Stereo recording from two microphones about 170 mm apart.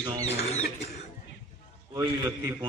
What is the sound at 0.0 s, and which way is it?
Rodents, 20° right (ahead or behind).